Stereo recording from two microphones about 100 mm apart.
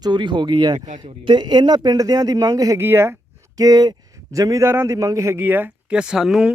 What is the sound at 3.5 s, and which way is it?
A man's voice, 40° right (ahead or behind).